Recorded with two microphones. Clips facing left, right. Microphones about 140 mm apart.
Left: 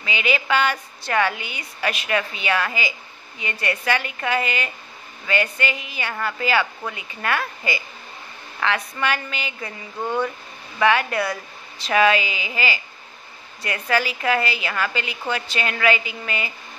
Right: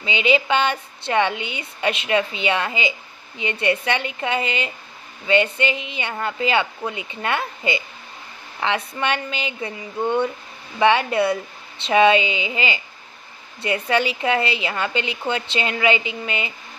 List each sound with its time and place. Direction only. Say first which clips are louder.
0.0 s a woman's voice: right 5 dB; 25° right (ahead or behind)